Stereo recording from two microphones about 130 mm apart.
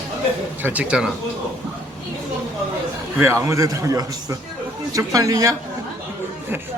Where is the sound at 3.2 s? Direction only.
20° right (ahead or behind).